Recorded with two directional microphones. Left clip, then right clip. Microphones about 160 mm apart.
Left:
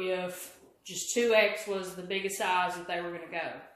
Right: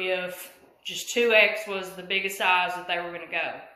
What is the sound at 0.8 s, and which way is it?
Speech, 25° left (ahead or behind).